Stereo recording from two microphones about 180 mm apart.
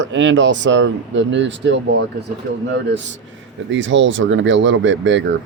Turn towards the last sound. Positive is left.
turn(degrees=-90)